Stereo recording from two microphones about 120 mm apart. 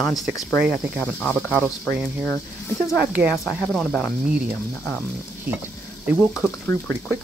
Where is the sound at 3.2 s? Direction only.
5° right (ahead or behind).